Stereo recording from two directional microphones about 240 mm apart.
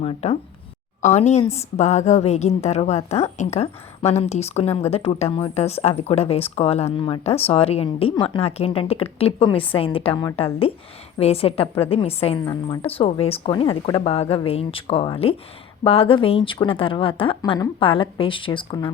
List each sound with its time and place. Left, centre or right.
0.0 s speech: left